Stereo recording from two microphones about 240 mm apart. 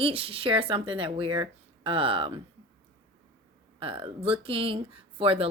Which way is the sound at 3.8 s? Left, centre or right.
Right.